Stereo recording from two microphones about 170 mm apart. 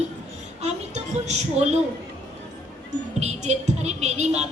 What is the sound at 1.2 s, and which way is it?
Speech, 40° right (ahead or behind).